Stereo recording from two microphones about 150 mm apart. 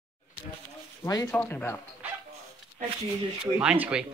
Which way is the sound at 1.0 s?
20° left (ahead or behind).